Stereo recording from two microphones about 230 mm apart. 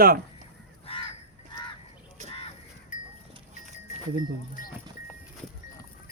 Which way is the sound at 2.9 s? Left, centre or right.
Left.